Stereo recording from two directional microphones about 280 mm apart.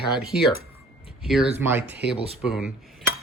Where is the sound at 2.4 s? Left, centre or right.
Centre.